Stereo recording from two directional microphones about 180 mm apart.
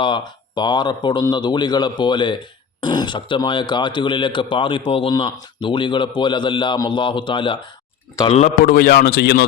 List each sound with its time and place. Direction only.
0.0 s a man's voice: 25° left (ahead or behind)
8.3 s a man's voice: 40° left (ahead or behind)
8.6 s a man's voice: 55° left (ahead or behind)